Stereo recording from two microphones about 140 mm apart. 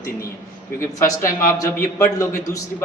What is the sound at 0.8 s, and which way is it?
Speech, 20° left (ahead or behind).